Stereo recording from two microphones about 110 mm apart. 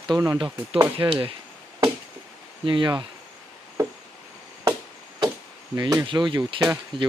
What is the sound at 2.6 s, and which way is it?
Speech, 45° right (ahead or behind).